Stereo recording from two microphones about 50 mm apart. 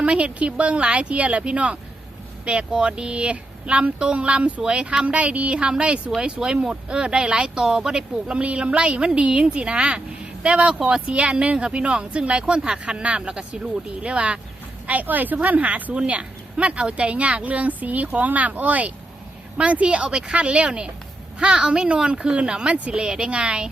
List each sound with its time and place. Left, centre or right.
0.0 s speech: right
14.8 s speech: right